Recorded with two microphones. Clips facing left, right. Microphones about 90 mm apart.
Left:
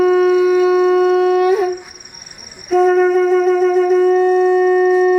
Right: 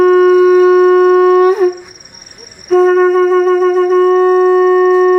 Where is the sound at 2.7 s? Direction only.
40° right (ahead or behind).